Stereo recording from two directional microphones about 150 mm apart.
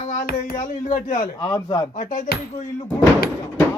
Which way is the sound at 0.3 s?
60° left (ahead or behind).